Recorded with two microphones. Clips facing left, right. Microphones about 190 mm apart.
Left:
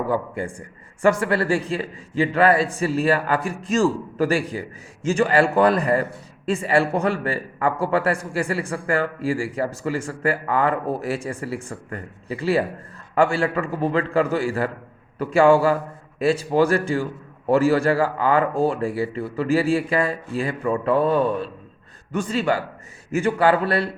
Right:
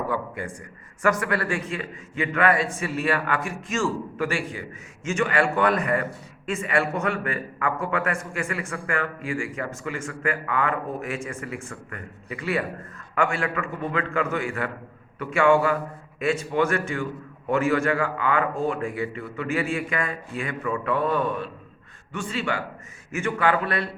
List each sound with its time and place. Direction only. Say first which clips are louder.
0.1 s a man's voice: left 5 dB; 30° left (ahead or behind)